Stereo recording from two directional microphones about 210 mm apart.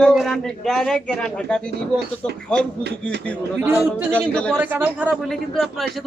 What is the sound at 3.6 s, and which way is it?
Speech, 10° right (ahead or behind).